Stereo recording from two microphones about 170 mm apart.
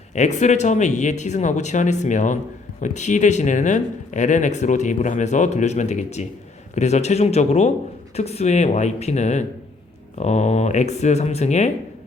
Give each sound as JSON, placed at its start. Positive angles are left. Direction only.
{"t": 0.1, "sound": "speech", "side_deg": 45}